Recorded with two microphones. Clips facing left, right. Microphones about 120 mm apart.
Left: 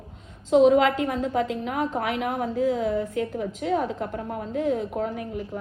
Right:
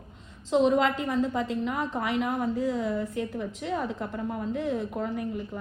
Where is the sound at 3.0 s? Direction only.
55° left (ahead or behind).